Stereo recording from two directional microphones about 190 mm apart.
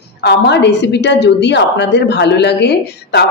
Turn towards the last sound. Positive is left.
turn(degrees=60)  # may be behind; listen again after turning